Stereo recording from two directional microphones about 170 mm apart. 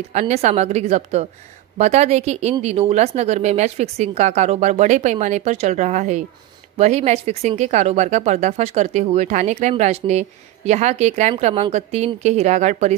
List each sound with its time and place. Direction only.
0.1 s speech: 40° right (ahead or behind)